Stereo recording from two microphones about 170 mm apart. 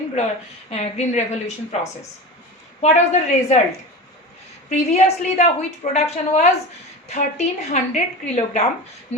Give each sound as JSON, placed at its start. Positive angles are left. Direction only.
{"t": 0.7, "sound": "a woman's voice", "side_deg": 40}
{"t": 2.8, "sound": "a woman's voice", "side_deg": 40}
{"t": 4.7, "sound": "a woman's voice", "side_deg": 40}